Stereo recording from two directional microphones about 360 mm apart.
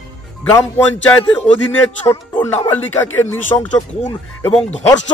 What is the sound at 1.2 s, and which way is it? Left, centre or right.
Speech, centre.